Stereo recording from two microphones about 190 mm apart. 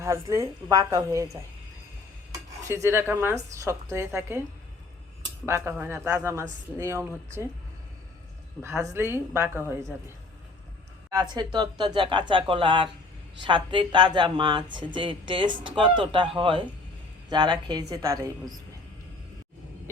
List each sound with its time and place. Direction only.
0.0 s a woman's voice: 15° right (ahead or behind)
2.6 s a woman's voice: 15° right (ahead or behind)
5.5 s a woman's voice: 15° right (ahead or behind)
8.6 s a woman's voice: 15° right (ahead or behind)
11.1 s speech: 20° right (ahead or behind)